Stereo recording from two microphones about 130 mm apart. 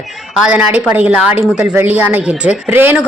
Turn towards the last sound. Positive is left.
turn(degrees=-15)  # may be behind; listen again after turning